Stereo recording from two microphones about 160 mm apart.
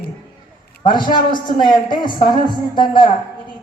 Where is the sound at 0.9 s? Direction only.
30° left (ahead or behind).